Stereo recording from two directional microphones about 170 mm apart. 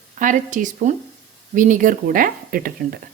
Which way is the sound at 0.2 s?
50° right (ahead or behind).